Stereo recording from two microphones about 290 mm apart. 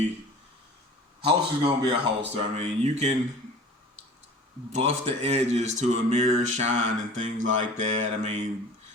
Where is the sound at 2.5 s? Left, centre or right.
Right.